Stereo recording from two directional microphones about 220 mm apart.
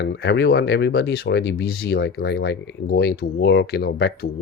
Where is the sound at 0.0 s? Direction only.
50° left (ahead or behind).